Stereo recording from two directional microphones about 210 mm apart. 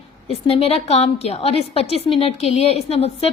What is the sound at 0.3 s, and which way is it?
A woman's voice, 30° left (ahead or behind).